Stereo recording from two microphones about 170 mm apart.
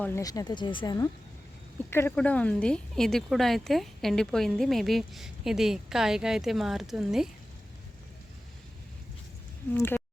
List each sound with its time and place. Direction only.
0.0 s speech: 20° left (ahead or behind); by 7.3 s centre (ahead or behind)
9.7 s speech: 15° left (ahead or behind)